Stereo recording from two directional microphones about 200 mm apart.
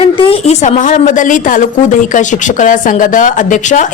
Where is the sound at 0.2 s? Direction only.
30° left (ahead or behind).